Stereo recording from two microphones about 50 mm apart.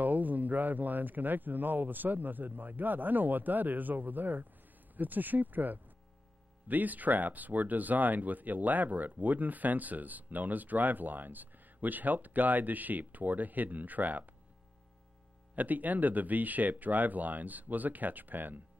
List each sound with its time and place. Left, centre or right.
0.0 s speech: right
15.5 s speech: right